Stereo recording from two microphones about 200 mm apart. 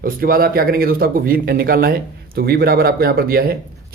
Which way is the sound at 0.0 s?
45° right (ahead or behind).